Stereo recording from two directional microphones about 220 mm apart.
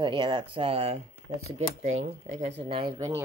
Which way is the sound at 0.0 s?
20° right (ahead or behind).